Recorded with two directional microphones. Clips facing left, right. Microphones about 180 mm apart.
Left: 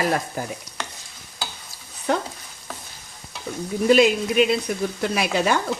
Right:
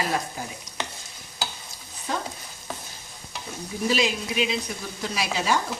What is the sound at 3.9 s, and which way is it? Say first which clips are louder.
Speech: left 9 dB; 55° left (ahead or behind).